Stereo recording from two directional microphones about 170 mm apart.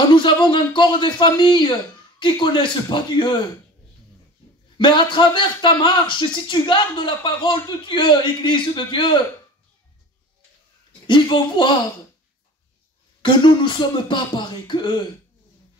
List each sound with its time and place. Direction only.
0.1 s a man's voice: 30° left (ahead or behind)
4.7 s a man's voice: 30° left (ahead or behind)
11.1 s a man's voice: 30° left (ahead or behind)
13.2 s a man's voice: 30° left (ahead or behind)